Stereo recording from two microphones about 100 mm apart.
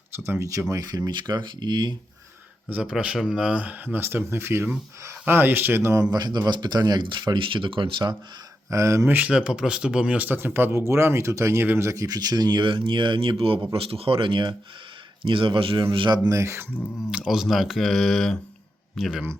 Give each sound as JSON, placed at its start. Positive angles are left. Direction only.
{"t": 0.3, "sound": "speech", "side_deg": -30}
{"t": 2.6, "sound": "speech", "side_deg": -10}
{"t": 8.7, "sound": "speech", "side_deg": -30}
{"t": 9.1, "sound": "speech", "side_deg": -10}
{"t": 13.4, "sound": "speech", "side_deg": -65}
{"t": 16.3, "sound": "speech", "side_deg": -30}
{"t": 17.1, "sound": "speech", "side_deg": -10}